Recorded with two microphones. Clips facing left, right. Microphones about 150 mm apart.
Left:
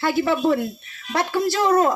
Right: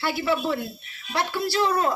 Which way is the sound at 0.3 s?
45° left (ahead or behind).